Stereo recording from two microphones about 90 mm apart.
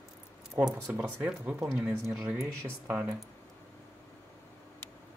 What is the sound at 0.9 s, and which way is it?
Speech, 20° right (ahead or behind).